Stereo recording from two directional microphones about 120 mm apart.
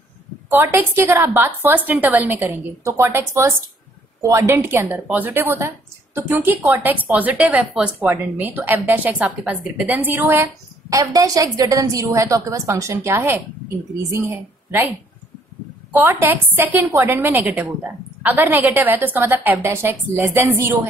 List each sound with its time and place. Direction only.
0.5 s a woman's voice: 20° right (ahead or behind)
9.4 s a woman's voice: 5° right (ahead or behind)
9.8 s a woman's voice: 15° right (ahead or behind)
15.9 s a woman's voice: 20° right (ahead or behind)